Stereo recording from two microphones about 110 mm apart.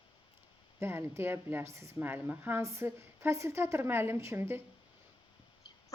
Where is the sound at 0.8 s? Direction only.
25° right (ahead or behind).